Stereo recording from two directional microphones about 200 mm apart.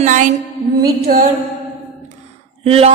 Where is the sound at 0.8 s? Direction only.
50° right (ahead or behind).